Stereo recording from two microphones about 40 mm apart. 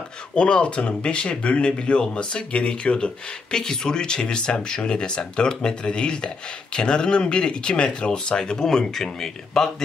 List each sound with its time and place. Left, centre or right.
0.4 s speech: left; by 9.7 s centre